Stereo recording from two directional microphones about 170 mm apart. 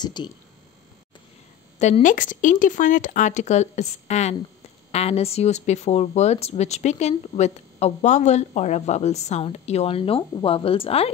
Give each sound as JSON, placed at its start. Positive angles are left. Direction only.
{"t": 0.0, "sound": "speech", "side_deg": 25}
{"t": 1.8, "sound": "speech", "side_deg": 40}